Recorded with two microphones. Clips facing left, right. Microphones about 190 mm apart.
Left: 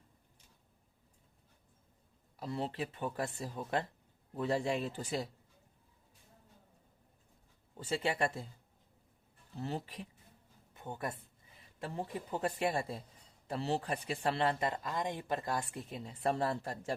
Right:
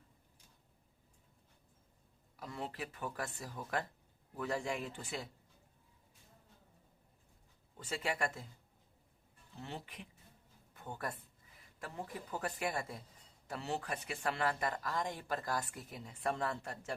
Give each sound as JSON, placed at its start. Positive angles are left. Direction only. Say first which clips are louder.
{"t": 2.3, "sound": "speech", "louder": "left 6 dB", "side_deg": 30}
{"t": 7.8, "sound": "speech", "louder": "left 4 dB", "side_deg": 30}
{"t": 9.6, "sound": "speech", "louder": "left 7 dB", "side_deg": 40}
{"t": 10.8, "sound": "speech", "louder": "left 3 dB", "side_deg": 20}